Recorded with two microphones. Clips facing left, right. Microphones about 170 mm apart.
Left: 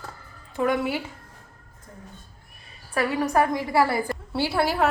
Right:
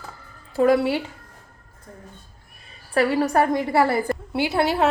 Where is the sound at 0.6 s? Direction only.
35° right (ahead or behind).